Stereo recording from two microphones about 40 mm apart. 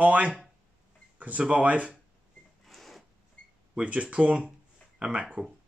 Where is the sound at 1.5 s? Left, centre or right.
Right.